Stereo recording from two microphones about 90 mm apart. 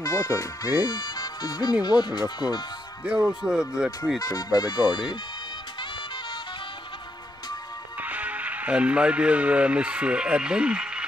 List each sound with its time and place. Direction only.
0.0 s speech: 40° left (ahead or behind)
3.1 s speech: 10° right (ahead or behind)
4.2 s speech: 45° left (ahead or behind)
8.0 s speech: 15° right (ahead or behind)